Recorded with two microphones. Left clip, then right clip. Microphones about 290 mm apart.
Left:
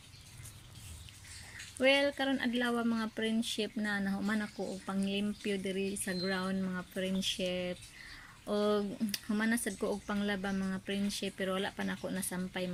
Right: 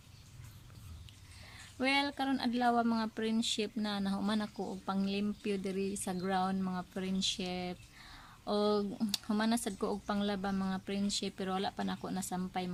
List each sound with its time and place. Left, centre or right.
1.8 s speech: centre